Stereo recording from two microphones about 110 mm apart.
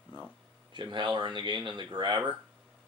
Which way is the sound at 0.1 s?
45° left (ahead or behind).